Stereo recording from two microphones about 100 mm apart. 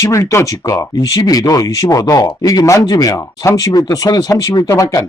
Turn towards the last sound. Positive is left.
turn(degrees=35)  # may be behind; listen again after turning